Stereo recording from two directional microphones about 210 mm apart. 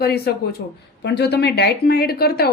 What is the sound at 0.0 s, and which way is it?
A woman's voice, 50° left (ahead or behind).